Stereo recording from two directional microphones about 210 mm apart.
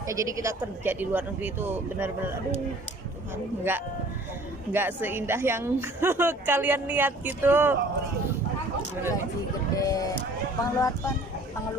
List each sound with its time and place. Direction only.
0.1 s a woman's voice: 15° right (ahead or behind)
3.7 s a woman's voice: 10° right (ahead or behind)
9.7 s speech: 15° left (ahead or behind)